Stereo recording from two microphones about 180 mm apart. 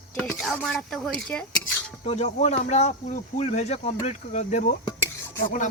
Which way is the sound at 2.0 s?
40° left (ahead or behind).